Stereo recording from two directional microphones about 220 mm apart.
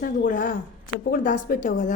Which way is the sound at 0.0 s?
40° left (ahead or behind).